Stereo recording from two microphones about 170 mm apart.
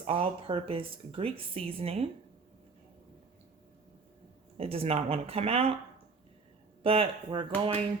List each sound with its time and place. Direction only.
0.0 s speech: 30° right (ahead or behind)
4.5 s speech: 35° right (ahead or behind)
6.8 s speech: 35° right (ahead or behind)